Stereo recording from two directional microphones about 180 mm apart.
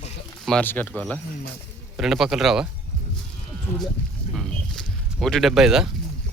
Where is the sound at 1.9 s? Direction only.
Centre (ahead or behind).